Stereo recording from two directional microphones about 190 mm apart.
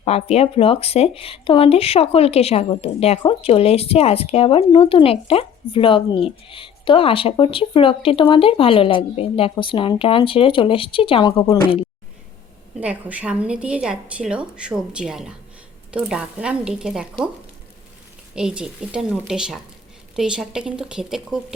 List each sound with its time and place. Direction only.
0.0 s speech: 35° left (ahead or behind)
12.8 s a woman's voice: 10° right (ahead or behind)
18.3 s a woman's voice: 5° right (ahead or behind)